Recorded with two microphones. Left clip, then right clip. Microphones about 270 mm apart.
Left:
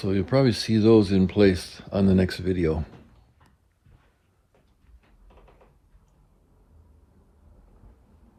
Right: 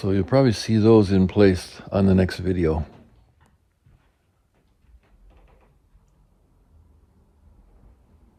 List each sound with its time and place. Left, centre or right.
0.0 s speech: right